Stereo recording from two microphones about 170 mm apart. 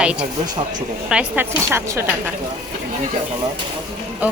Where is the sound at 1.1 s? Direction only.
10° right (ahead or behind).